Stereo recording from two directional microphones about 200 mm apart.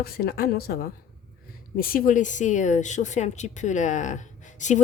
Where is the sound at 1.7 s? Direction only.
45° left (ahead or behind).